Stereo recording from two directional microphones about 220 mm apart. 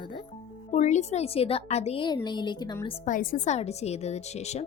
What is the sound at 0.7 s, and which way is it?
Speech, 30° left (ahead or behind).